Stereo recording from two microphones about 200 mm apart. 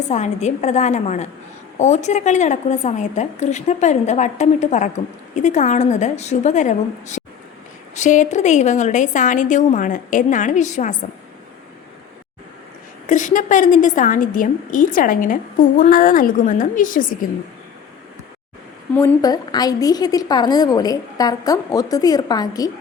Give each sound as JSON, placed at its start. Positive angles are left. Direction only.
{"t": 0.1, "sound": "a woman's voice", "side_deg": 35}
{"t": 13.1, "sound": "a woman's voice", "side_deg": 40}
{"t": 18.9, "sound": "a woman's voice", "side_deg": 15}